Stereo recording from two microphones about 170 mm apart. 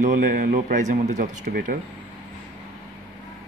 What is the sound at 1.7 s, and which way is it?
Speech, 55° right (ahead or behind).